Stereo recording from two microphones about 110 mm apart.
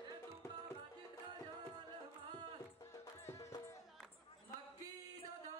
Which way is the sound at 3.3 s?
25° left (ahead or behind).